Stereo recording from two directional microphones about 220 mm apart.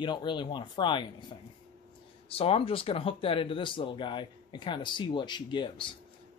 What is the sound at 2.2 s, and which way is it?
Speech, 25° left (ahead or behind).